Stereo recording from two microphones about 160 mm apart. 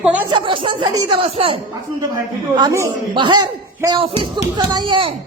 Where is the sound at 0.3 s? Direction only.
30° right (ahead or behind).